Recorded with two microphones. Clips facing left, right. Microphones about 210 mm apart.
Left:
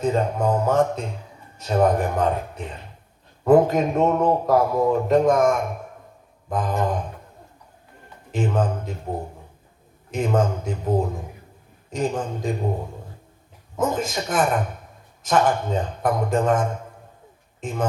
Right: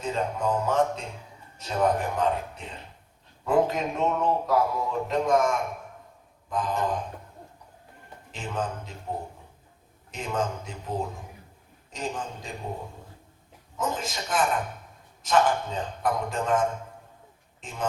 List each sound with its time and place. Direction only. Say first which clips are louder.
0.0 s a man's voice: left 7 dB; 50° left (ahead or behind)
3.4 s a man's voice: left 8 dB; 50° left (ahead or behind)
8.3 s a man's voice: left 9 dB; 50° left (ahead or behind)
10.1 s a man's voice: left 8 dB; 50° left (ahead or behind)
13.7 s a man's voice: left 7 dB; 50° left (ahead or behind)
17.6 s speech: left 9 dB; 50° left (ahead or behind)